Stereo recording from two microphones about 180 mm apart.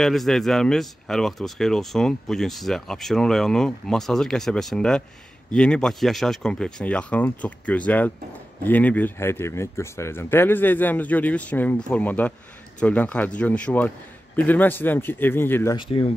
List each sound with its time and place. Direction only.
0.0 s speech: centre (ahead or behind)
15.7 s speech: 30° left (ahead or behind)